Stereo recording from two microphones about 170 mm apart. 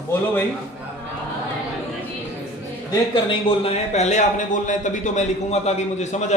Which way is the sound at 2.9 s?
30° left (ahead or behind).